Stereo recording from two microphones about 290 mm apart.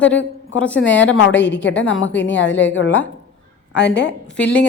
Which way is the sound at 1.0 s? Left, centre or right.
Left.